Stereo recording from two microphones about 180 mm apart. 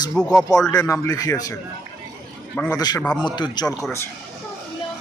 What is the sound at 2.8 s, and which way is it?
Speech, 20° left (ahead or behind).